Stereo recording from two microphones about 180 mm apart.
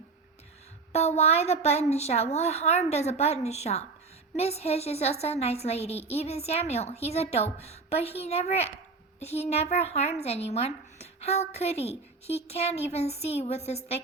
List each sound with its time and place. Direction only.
0.9 s speech: 35° left (ahead or behind)